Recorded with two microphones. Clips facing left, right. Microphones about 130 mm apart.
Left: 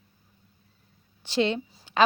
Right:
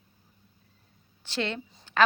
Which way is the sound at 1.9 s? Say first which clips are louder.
Left 1 dB; 15° left (ahead or behind).